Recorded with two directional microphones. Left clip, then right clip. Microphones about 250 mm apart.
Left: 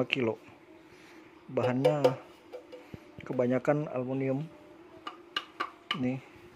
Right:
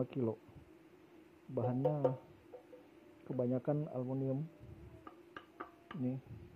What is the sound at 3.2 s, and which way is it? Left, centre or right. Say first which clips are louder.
Speech: left 9 dB; left.